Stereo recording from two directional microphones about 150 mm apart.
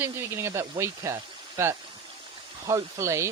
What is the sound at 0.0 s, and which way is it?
Speech, 15° right (ahead or behind).